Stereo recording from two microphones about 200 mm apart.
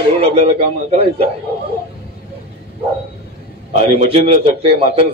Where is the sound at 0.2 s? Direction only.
30° right (ahead or behind).